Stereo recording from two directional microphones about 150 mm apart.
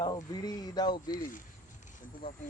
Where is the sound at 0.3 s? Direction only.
25° left (ahead or behind).